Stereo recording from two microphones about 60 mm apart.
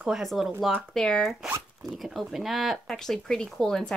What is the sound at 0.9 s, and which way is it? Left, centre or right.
Speech, centre.